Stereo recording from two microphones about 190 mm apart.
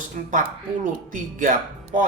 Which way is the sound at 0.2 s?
45° right (ahead or behind).